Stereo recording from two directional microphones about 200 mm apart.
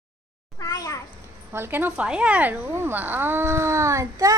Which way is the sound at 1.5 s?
10° right (ahead or behind).